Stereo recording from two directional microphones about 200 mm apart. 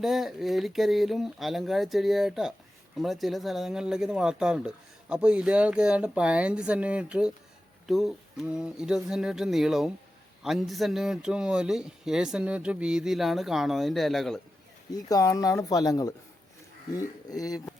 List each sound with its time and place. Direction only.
0.0 s speech: centre (ahead or behind)
14.9 s speech: 15° left (ahead or behind)